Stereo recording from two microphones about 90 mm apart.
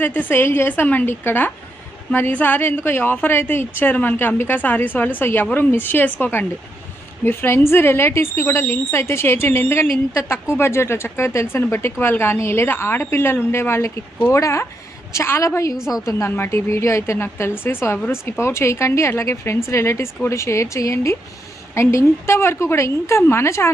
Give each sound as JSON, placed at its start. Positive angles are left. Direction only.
{"t": 0.0, "sound": "a woman's voice", "side_deg": 20}